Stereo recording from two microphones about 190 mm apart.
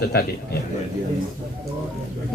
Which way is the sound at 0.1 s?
55° left (ahead or behind).